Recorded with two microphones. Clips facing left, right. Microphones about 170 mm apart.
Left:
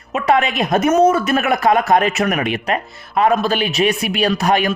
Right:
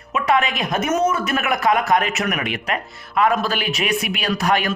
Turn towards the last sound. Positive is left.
turn(degrees=20)  # may be behind; listen again after turning